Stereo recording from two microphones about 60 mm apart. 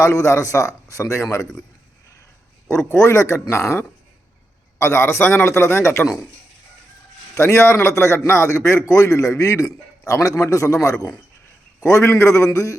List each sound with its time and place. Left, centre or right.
0.0 s a man's voice: left
2.9 s a man's voice: left
4.8 s a man's voice: left
7.3 s a man's voice: left